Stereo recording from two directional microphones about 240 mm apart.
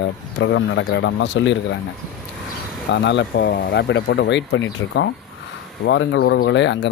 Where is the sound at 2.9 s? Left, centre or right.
Left.